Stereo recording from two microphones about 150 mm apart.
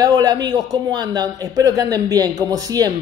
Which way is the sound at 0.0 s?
25° right (ahead or behind).